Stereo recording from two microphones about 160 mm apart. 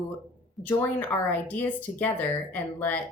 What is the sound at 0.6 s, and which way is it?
Speech, 10° left (ahead or behind).